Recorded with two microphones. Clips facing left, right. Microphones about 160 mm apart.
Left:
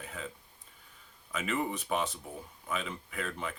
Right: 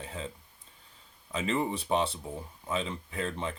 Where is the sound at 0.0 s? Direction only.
30° right (ahead or behind).